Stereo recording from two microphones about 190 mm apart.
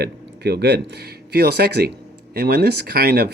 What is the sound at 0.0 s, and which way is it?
Speech, 60° right (ahead or behind).